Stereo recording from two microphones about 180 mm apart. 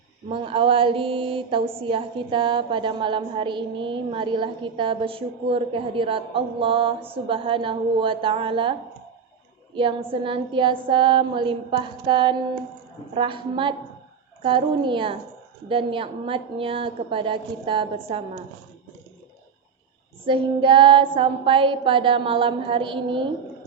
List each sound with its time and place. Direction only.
0.3 s a woman's voice: 30° right (ahead or behind)
9.7 s a woman's voice: 30° right (ahead or behind)
20.2 s a woman's voice: 30° right (ahead or behind)